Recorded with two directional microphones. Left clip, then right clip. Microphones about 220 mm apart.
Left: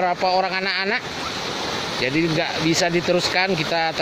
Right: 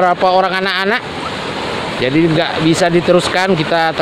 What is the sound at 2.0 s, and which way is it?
Speech, 10° right (ahead or behind).